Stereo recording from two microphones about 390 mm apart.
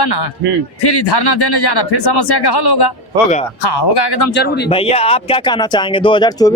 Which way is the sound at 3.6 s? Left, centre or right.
Left.